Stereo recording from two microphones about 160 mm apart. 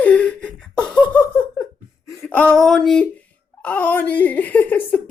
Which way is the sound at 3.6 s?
10° left (ahead or behind).